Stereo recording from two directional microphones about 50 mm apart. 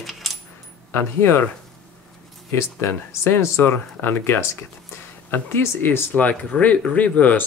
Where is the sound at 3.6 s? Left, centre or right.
Left.